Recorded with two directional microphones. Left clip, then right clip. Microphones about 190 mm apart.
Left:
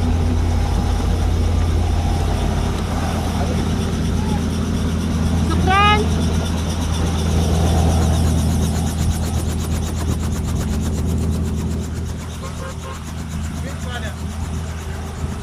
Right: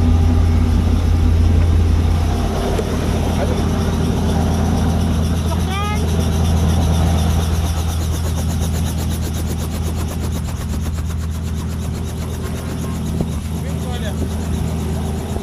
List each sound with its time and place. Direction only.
5.7 s vehicle: 50° left (ahead or behind)